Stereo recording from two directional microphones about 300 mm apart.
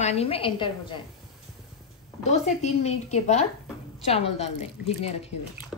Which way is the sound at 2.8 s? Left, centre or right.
Left.